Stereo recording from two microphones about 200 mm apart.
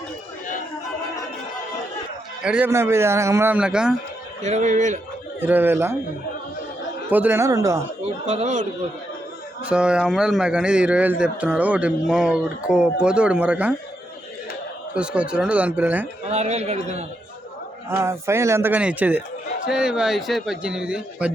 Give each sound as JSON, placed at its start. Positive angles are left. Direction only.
{"t": 2.4, "sound": "a man's voice", "side_deg": -5}
{"t": 4.4, "sound": "a man's voice", "side_deg": -35}
{"t": 5.4, "sound": "a man's voice", "side_deg": -10}
{"t": 7.1, "sound": "a man's voice", "side_deg": -10}
{"t": 8.3, "sound": "a man's voice", "side_deg": -35}
{"t": 9.6, "sound": "a man's voice", "side_deg": -5}
{"t": 14.9, "sound": "a man's voice", "side_deg": -5}
{"t": 16.3, "sound": "a man's voice", "side_deg": -35}
{"t": 17.8, "sound": "a man's voice", "side_deg": -15}